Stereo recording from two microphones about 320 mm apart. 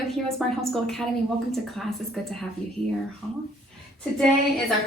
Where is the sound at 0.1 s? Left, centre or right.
Centre.